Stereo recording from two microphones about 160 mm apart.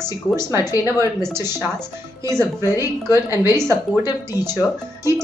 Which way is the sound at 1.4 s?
25° left (ahead or behind).